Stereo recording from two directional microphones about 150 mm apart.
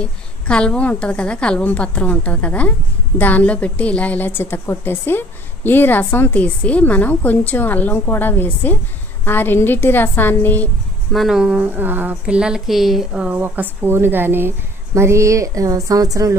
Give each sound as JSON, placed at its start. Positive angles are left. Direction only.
{"t": 0.0, "sound": "a woman's voice", "side_deg": 5}
{"t": 11.1, "sound": "speech", "side_deg": -5}
{"t": 15.0, "sound": "a sound", "side_deg": -20}